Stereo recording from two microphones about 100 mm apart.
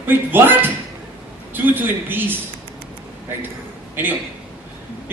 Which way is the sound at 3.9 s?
20° right (ahead or behind).